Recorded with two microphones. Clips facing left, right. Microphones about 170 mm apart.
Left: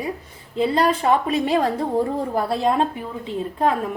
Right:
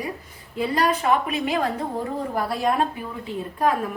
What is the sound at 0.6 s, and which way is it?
A woman's voice, 30° left (ahead or behind).